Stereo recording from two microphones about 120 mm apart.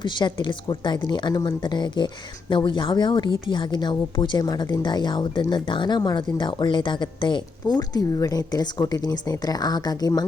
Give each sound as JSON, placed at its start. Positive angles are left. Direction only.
{"t": 0.0, "sound": "speech", "side_deg": 40}